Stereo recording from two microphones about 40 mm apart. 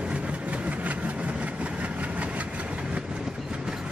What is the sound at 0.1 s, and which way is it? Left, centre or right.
Vehicle, right.